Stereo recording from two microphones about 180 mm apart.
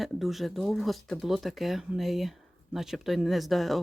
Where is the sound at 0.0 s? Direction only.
Centre (ahead or behind).